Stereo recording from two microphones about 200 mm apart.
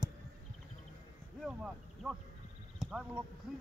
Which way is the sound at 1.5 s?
5° right (ahead or behind).